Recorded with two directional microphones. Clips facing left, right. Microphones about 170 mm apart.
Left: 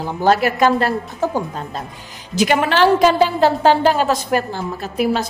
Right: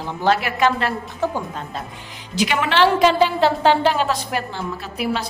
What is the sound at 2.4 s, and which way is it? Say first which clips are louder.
A woman's voice: left 3 dB; 45° left (ahead or behind).